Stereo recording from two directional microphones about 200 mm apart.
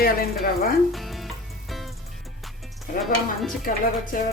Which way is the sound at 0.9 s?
Centre (ahead or behind).